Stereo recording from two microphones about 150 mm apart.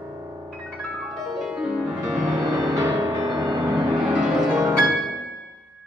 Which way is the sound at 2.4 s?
30° right (ahead or behind).